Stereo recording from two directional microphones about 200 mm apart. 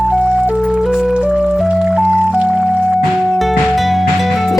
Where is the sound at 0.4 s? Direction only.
5° right (ahead or behind).